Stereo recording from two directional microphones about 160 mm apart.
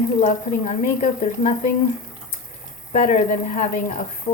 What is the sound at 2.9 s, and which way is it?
Speech, 50° left (ahead or behind).